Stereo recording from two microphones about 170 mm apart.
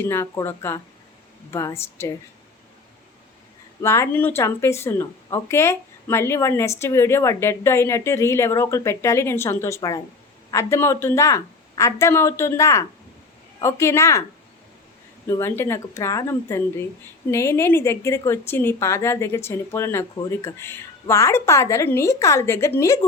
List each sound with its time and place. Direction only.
0.1 s speech: 15° left (ahead or behind)
3.8 s speech: 15° left (ahead or behind)
15.3 s speech: 15° left (ahead or behind)